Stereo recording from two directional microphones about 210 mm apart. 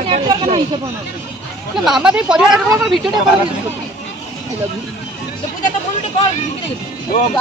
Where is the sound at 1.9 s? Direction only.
5° right (ahead or behind).